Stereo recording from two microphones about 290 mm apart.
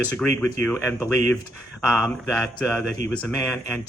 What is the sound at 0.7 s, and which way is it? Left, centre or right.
Speech, centre.